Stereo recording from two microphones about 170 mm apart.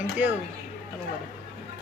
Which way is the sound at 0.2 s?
10° right (ahead or behind).